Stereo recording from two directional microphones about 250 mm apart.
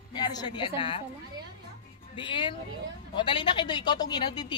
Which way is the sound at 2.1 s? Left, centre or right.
Centre.